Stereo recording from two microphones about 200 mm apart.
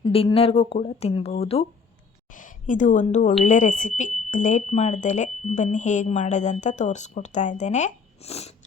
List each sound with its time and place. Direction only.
0.0 s speech: 25° left (ahead or behind)
2.3 s a woman's voice: 40° left (ahead or behind)